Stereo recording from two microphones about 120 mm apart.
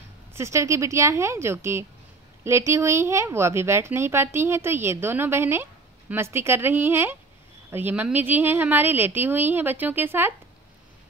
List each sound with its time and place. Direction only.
0.3 s a woman's voice: 25° right (ahead or behind)